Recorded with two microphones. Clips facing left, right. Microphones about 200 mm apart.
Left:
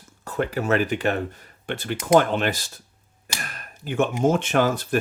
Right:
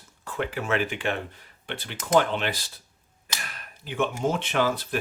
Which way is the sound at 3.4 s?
45° left (ahead or behind).